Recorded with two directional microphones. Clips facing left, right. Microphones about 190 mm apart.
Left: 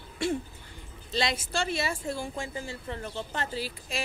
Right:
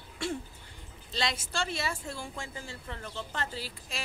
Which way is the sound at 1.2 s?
15° left (ahead or behind).